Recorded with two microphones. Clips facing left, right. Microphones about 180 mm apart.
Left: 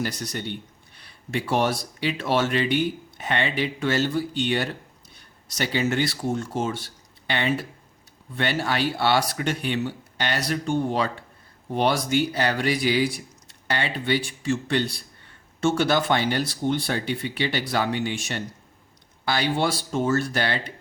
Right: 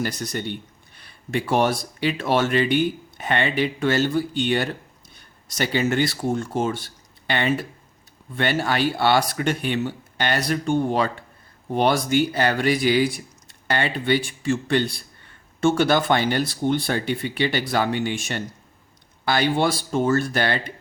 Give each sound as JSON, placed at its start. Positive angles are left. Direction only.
{"t": 0.0, "sound": "speech", "side_deg": -50}